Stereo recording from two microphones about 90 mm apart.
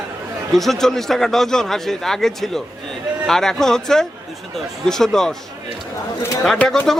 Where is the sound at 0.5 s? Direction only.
Centre (ahead or behind).